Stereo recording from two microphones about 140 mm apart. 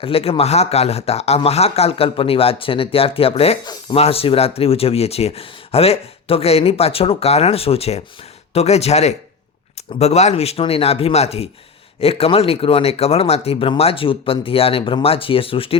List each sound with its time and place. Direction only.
0.0 s speech: 45° left (ahead or behind)